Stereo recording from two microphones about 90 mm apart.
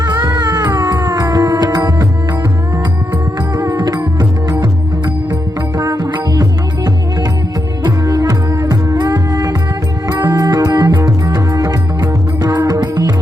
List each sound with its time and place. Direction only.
0.0 s music: 50° right (ahead or behind)
3.5 s music: 40° right (ahead or behind)
5.7 s music: 45° right (ahead or behind)